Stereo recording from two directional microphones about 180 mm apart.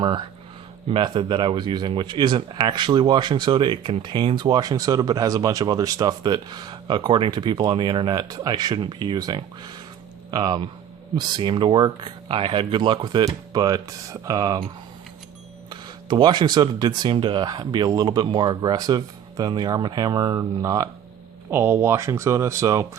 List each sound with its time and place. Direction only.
0.0 s speech: 25° right (ahead or behind)
15.7 s speech: 25° right (ahead or behind)